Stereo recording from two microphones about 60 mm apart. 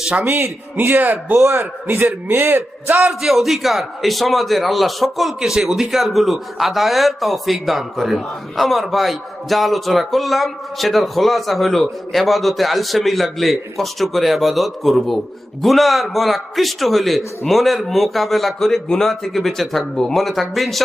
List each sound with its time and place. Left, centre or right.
0.2 s speech: right
3.1 s a man's voice: centre